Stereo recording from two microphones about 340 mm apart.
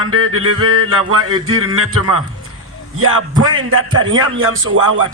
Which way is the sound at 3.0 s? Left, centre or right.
Right.